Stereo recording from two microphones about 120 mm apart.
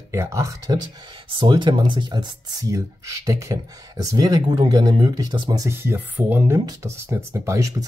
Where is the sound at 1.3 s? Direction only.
40° right (ahead or behind).